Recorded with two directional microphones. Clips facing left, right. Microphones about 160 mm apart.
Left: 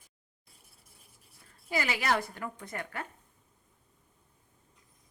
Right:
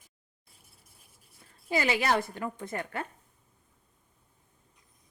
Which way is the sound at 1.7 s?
25° right (ahead or behind).